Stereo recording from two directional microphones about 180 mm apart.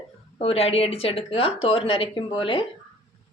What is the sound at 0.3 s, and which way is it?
Speech, 35° left (ahead or behind).